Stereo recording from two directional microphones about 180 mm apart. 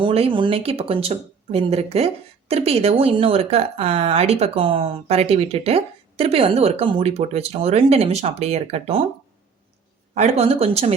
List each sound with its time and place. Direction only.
0.0 s speech: 30° right (ahead or behind)
10.2 s speech: 35° right (ahead or behind)